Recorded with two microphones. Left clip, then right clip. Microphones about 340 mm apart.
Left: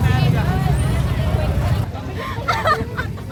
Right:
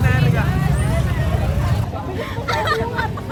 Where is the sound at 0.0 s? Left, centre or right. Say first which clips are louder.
Right 1 dB; centre.